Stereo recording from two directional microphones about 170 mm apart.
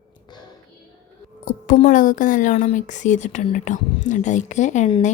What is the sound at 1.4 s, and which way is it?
A woman's voice, 50° left (ahead or behind).